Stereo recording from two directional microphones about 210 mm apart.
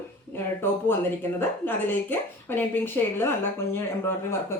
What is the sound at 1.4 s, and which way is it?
Speech, 10° left (ahead or behind).